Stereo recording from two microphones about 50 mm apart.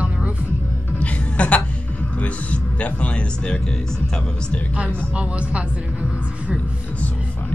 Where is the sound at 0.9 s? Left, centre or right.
Left.